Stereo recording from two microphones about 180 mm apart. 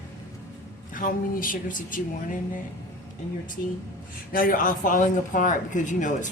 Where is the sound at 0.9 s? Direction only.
50° left (ahead or behind).